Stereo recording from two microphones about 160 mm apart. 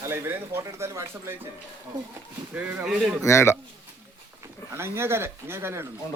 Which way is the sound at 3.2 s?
15° left (ahead or behind).